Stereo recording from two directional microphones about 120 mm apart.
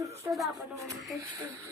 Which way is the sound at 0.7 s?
25° right (ahead or behind).